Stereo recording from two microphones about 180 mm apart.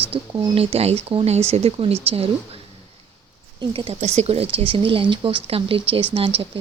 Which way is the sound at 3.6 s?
30° right (ahead or behind).